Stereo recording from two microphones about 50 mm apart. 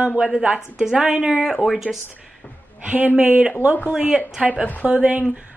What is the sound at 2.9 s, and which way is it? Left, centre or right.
Speech, right.